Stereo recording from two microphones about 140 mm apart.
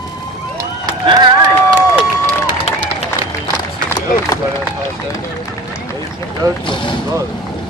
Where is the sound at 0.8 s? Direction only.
30° right (ahead or behind).